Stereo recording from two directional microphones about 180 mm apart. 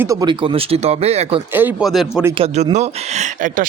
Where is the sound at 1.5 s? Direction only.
10° right (ahead or behind).